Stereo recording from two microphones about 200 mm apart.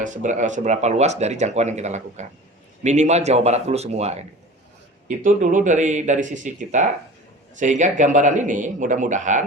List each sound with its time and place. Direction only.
0.0 s speech: 40° right (ahead or behind)